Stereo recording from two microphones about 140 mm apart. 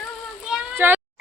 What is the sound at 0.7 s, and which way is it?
Speech, 15° right (ahead or behind).